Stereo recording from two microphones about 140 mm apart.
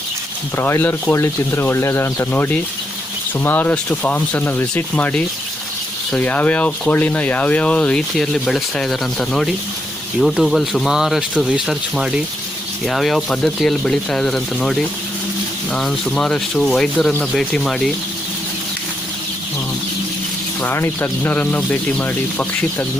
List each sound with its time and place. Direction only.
0.5 s speech: 15° left (ahead or behind)
20.6 s speech: 15° left (ahead or behind)